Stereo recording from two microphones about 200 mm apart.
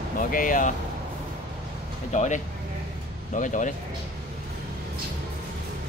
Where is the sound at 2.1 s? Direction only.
35° left (ahead or behind).